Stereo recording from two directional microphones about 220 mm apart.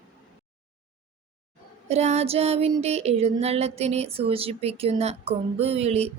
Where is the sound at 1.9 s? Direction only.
30° right (ahead or behind).